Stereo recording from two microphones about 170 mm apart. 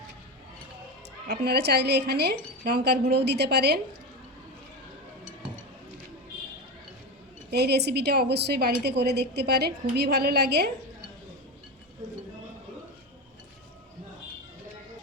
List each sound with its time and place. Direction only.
1.3 s a woman's voice: 75° right (ahead or behind)
7.5 s a woman's voice: 75° right (ahead or behind)